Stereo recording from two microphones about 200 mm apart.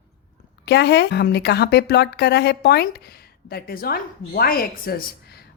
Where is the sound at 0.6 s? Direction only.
60° left (ahead or behind).